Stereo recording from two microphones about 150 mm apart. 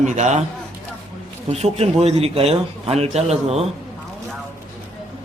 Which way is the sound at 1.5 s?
45° right (ahead or behind).